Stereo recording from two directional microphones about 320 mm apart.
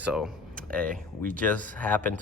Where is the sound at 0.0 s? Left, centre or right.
Centre.